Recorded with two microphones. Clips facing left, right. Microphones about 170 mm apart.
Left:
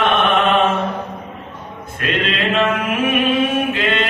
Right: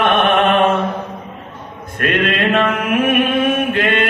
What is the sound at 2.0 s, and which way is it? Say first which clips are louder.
Mantra: right 4 dB; 55° right (ahead or behind).